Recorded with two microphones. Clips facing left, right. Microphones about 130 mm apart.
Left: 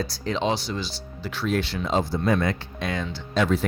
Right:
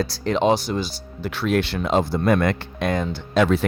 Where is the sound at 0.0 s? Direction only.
70° right (ahead or behind).